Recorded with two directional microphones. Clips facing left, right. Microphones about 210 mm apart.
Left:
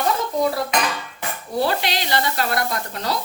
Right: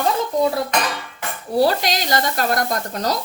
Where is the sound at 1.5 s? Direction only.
40° right (ahead or behind).